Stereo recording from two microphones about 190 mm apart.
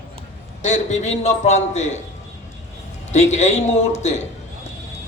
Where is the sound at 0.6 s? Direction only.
40° left (ahead or behind).